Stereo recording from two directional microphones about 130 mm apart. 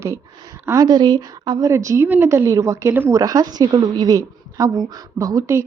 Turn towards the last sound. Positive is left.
turn(degrees=-25)  # may be behind; listen again after turning